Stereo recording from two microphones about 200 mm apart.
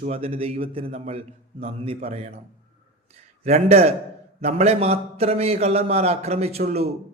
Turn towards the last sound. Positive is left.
turn(degrees=-30)  # may be behind; listen again after turning